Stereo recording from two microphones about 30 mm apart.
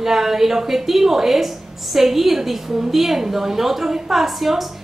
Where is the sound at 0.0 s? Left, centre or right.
Centre.